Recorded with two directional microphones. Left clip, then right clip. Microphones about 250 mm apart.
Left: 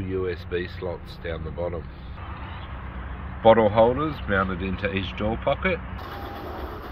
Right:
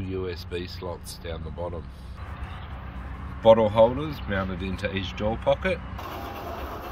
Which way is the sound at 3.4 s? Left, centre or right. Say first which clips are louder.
Left 1 dB; centre.